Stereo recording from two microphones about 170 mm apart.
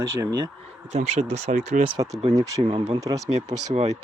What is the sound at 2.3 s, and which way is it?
Speech, 20° right (ahead or behind).